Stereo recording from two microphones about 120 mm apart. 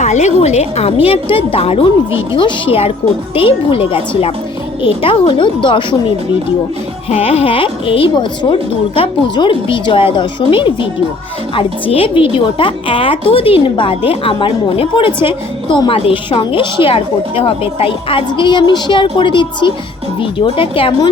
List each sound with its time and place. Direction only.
0.0 s a woman's voice: 75° left (ahead or behind); by 6.0 s 40° left (ahead or behind)
7.1 s a woman's voice: 55° left (ahead or behind)